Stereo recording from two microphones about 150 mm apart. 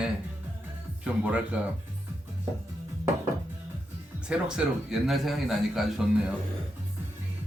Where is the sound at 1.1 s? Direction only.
10° right (ahead or behind).